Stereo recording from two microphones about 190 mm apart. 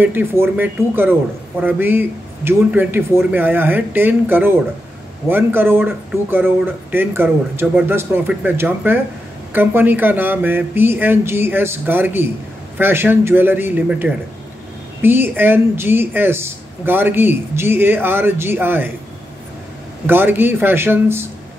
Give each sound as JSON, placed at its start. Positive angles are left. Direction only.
{"t": 0.0, "sound": "a woman's voice", "side_deg": -10}
{"t": 20.1, "sound": "a woman's voice", "side_deg": -10}